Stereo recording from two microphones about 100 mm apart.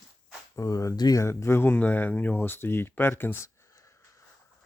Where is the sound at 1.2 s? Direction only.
25° left (ahead or behind).